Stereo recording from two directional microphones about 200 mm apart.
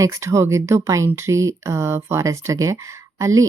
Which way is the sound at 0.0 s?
15° right (ahead or behind).